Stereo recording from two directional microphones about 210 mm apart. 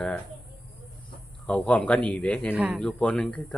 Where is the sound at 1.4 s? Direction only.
5° left (ahead or behind).